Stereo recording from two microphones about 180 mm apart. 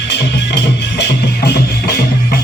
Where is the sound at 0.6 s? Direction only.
70° left (ahead or behind).